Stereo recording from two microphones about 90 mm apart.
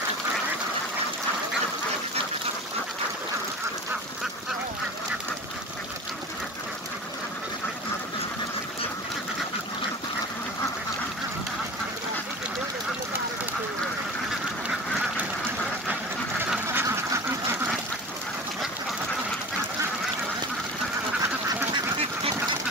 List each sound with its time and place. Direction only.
16.6 s duck: 30° right (ahead or behind)